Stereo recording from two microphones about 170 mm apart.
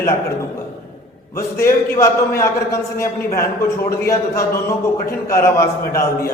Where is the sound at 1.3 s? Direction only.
15° left (ahead or behind).